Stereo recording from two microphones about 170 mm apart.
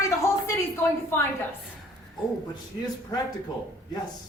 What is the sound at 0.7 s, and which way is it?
Speech, 15° left (ahead or behind).